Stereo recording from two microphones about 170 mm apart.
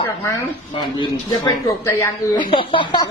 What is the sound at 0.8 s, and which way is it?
Speech, 30° left (ahead or behind).